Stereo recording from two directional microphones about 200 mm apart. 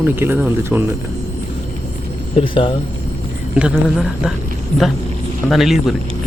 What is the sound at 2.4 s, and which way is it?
Speech, 25° left (ahead or behind).